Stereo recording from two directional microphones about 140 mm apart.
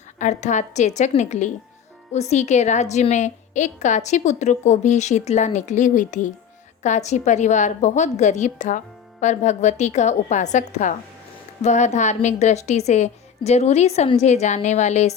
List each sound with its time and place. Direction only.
0.2 s a woman's voice: 55° left (ahead or behind)